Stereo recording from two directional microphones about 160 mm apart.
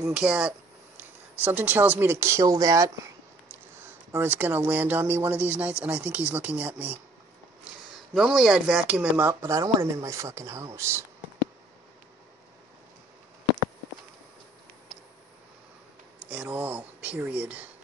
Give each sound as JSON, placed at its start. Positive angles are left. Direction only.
{"t": 0.1, "sound": "speech", "side_deg": -5}
{"t": 8.1, "sound": "speech", "side_deg": -5}
{"t": 16.3, "sound": "speech", "side_deg": -10}